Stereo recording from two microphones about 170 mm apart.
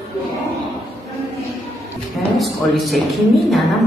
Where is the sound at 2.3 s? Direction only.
Centre (ahead or behind).